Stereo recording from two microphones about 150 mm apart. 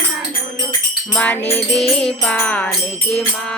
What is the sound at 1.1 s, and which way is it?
Music, 10° left (ahead or behind).